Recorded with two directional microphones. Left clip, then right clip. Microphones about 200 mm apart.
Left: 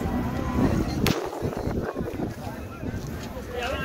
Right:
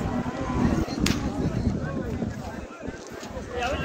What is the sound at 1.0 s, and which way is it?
Vehicle, 45° right (ahead or behind).